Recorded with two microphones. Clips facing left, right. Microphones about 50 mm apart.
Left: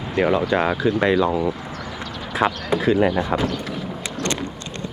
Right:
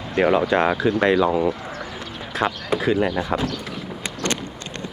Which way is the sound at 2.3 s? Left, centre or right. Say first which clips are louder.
Left 2 dB; centre.